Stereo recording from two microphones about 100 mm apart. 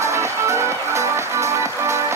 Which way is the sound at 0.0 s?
30° right (ahead or behind).